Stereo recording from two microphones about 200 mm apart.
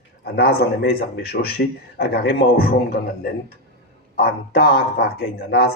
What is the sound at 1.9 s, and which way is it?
Speech, 50° left (ahead or behind).